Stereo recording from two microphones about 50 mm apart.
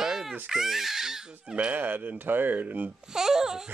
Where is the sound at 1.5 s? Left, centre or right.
Right.